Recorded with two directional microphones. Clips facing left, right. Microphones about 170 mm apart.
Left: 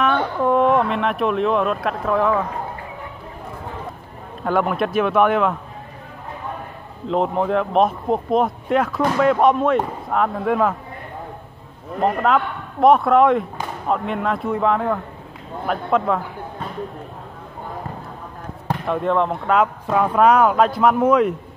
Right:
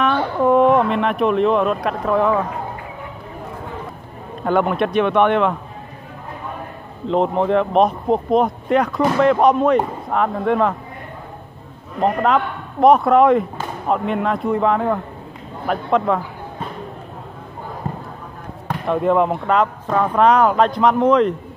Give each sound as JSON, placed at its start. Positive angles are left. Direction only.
{"t": 0.0, "sound": "speech", "side_deg": 0}
{"t": 4.4, "sound": "speech", "side_deg": 0}
{"t": 7.1, "sound": "speech", "side_deg": 0}
{"t": 12.0, "sound": "a man's voice", "side_deg": 0}
{"t": 17.8, "sound": "a sound", "side_deg": -20}
{"t": 18.9, "sound": "speech", "side_deg": -5}
{"t": 19.5, "sound": "speech", "side_deg": 5}